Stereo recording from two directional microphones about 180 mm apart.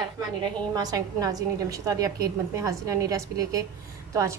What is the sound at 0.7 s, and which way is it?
A woman's voice, 20° right (ahead or behind).